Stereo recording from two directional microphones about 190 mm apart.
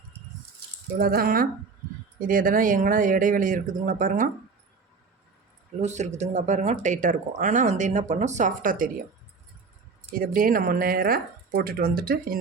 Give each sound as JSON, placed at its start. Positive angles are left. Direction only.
{"t": 0.9, "sound": "speech", "side_deg": -50}
{"t": 5.8, "sound": "speech", "side_deg": -40}
{"t": 10.1, "sound": "speech", "side_deg": -50}